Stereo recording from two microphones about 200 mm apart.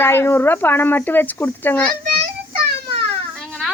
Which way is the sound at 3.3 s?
5° left (ahead or behind).